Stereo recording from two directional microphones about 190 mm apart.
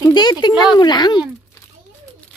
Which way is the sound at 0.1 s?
20° left (ahead or behind).